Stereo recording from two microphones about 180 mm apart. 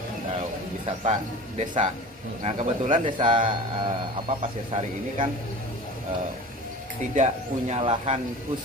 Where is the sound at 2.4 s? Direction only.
40° right (ahead or behind).